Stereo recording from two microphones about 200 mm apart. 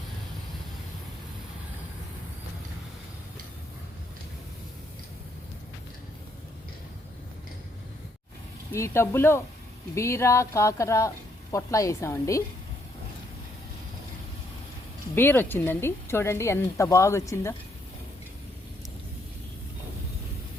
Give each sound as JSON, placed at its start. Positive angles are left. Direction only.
{"t": 8.7, "sound": "speech", "side_deg": 15}
{"t": 15.1, "sound": "speech", "side_deg": 10}